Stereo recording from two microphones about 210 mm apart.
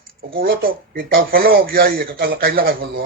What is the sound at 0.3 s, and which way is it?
Speech, 45° right (ahead or behind).